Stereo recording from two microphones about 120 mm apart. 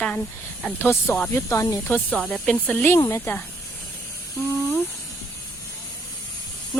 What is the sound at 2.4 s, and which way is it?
Speech, 10° left (ahead or behind).